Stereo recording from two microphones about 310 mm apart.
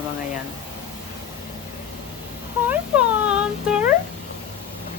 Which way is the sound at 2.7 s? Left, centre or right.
Centre.